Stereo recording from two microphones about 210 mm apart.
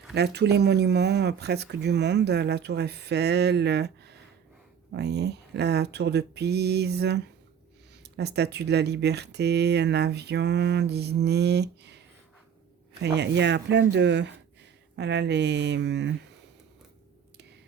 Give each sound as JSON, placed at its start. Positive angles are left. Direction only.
{"t": 0.1, "sound": "speech", "side_deg": -50}
{"t": 13.0, "sound": "speech", "side_deg": -55}